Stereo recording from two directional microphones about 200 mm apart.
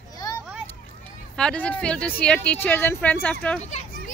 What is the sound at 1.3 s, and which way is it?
Speech, 5° left (ahead or behind).